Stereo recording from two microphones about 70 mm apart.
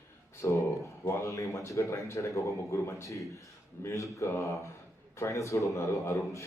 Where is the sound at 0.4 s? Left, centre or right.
Left.